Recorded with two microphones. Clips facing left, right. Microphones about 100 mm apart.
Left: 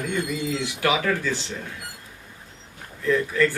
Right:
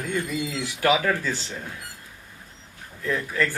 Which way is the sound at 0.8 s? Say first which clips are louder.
Right 2 dB; 40° right (ahead or behind).